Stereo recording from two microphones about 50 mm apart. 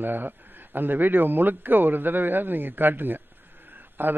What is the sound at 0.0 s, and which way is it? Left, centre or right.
A man's voice, right.